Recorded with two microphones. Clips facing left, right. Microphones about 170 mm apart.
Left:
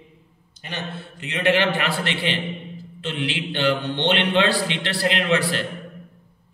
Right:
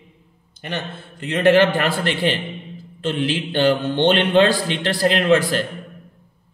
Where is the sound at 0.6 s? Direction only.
50° right (ahead or behind).